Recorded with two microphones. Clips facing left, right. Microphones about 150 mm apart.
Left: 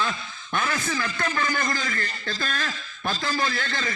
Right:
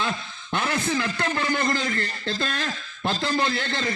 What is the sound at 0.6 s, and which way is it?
A man's voice, 30° right (ahead or behind).